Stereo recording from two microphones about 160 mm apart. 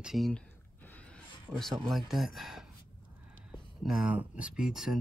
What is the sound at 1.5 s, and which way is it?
Speech, 15° right (ahead or behind).